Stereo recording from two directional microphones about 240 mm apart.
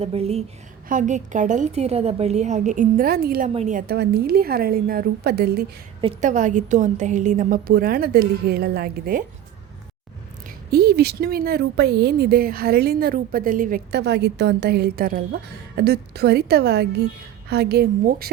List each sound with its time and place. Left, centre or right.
0.0 s a woman's voice: right
6.0 s speech: right
10.7 s speech: right